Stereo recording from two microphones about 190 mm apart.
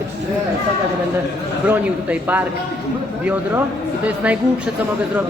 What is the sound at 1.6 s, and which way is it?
Speech, 10° right (ahead or behind).